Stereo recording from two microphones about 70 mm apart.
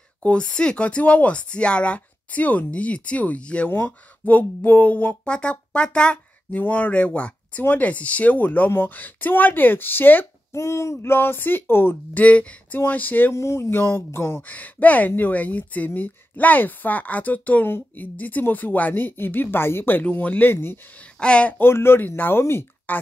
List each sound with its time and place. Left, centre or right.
0.2 s speech: centre
3.7 s speech: left
10.5 s speech: left
13.3 s speech: left
14.4 s speech: left
21.2 s speech: centre
21.5 s speech: left
22.9 s speech: left